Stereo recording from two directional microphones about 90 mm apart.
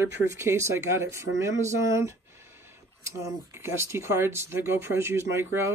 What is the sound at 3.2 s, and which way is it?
Speech, 30° right (ahead or behind).